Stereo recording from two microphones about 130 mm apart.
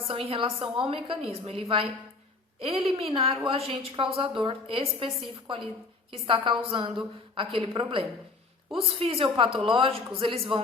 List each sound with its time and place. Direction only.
0.1 s a woman's voice: 45° right (ahead or behind)